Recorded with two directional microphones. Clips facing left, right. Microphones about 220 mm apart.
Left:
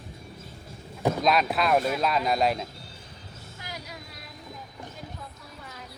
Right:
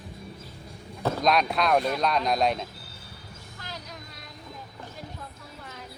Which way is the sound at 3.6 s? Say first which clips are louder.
Left 1 dB; 10° left (ahead or behind).